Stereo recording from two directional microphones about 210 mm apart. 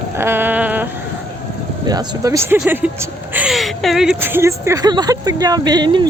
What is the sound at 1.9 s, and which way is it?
A woman's voice, 15° right (ahead or behind).